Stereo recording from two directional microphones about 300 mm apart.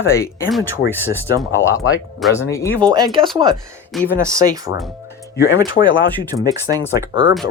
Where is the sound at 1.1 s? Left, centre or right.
Centre.